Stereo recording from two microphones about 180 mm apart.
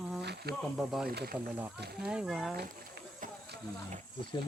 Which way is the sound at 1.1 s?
60° right (ahead or behind).